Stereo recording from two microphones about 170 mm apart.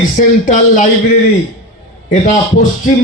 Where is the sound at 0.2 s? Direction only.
45° left (ahead or behind).